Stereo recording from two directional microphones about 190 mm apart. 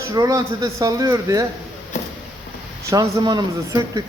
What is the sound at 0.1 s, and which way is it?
Speech, 20° right (ahead or behind).